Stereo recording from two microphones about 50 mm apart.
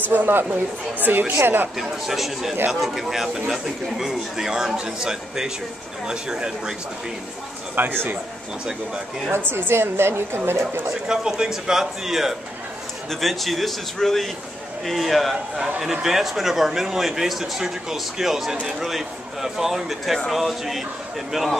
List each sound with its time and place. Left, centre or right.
0.0 s a woman's voice: right
1.8 s a man's voice: centre
7.8 s a woman's voice: right
9.5 s a woman's voice: right
11.1 s a man's voice: centre